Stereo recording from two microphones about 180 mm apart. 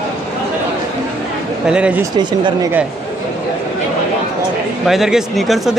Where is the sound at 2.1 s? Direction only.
25° right (ahead or behind).